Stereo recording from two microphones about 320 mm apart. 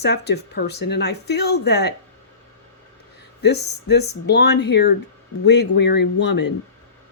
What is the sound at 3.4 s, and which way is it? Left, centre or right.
Speech, left.